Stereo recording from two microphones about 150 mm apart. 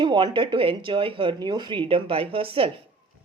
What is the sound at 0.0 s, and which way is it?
A woman's voice, 30° right (ahead or behind).